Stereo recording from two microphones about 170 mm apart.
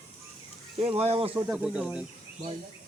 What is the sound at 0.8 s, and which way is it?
Speech, 35° right (ahead or behind).